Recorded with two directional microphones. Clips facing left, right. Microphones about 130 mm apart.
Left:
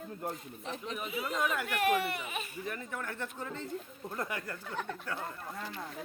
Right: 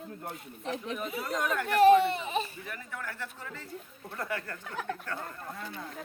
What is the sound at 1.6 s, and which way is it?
Speech, 35° right (ahead or behind).